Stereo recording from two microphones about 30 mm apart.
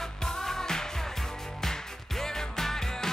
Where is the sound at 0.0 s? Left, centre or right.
Centre.